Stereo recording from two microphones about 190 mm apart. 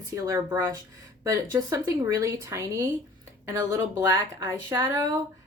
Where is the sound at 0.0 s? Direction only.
15° right (ahead or behind).